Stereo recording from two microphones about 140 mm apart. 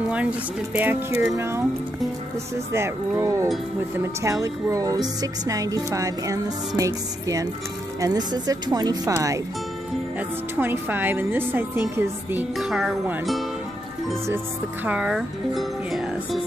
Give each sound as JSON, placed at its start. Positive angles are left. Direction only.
{"t": 0.1, "sound": "a woman's voice", "side_deg": -10}
{"t": 2.7, "sound": "speech", "side_deg": -20}
{"t": 10.5, "sound": "a woman's voice", "side_deg": -15}
{"t": 12.5, "sound": "speech", "side_deg": -5}
{"t": 14.9, "sound": "speech", "side_deg": -5}